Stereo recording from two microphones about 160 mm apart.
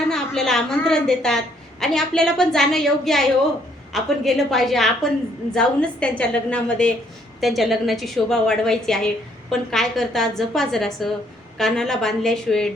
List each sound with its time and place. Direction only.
0.1 s a woman's voice: 5° left (ahead or behind)